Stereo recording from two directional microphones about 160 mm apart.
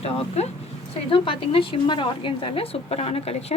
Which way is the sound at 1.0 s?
35° left (ahead or behind).